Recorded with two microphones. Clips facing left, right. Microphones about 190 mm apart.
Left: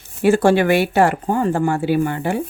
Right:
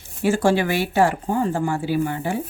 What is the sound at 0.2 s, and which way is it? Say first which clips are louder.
Speech: left 5 dB; 60° left (ahead or behind).